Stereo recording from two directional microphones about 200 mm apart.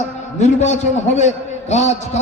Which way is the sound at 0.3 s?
35° left (ahead or behind).